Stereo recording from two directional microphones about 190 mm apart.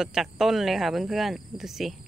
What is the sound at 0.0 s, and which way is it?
Speech, centre (ahead or behind).